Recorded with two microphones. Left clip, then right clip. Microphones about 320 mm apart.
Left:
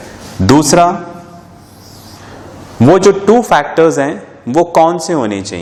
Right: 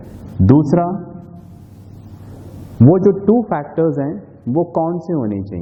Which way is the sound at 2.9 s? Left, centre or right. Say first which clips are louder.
Left 6 dB; centre.